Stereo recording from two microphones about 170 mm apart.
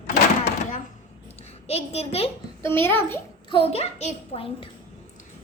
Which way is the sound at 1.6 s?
40° left (ahead or behind).